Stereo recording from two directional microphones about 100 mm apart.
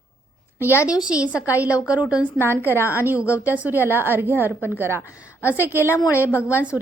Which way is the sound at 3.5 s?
15° right (ahead or behind).